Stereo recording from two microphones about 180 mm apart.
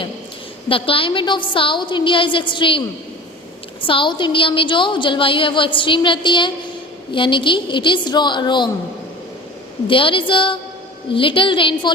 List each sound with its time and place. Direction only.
0.7 s a woman's voice: 30° left (ahead or behind)
9.8 s a woman's voice: 30° left (ahead or behind)